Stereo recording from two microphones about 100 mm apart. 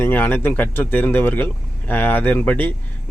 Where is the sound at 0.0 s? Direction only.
20° left (ahead or behind).